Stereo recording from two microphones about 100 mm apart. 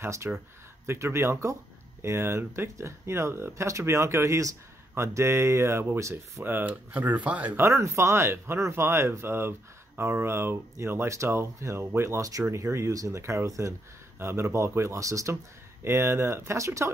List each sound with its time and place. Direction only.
0.0 s speech: 25° right (ahead or behind)
7.6 s speech: 30° right (ahead or behind)